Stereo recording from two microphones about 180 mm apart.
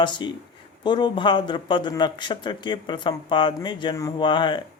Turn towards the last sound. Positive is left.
turn(degrees=25)  # may be behind; listen again after turning